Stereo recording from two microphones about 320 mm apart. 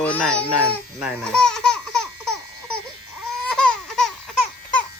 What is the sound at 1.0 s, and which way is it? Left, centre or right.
Baby laughter, centre.